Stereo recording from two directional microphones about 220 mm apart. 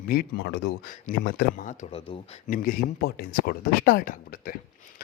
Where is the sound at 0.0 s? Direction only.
45° left (ahead or behind).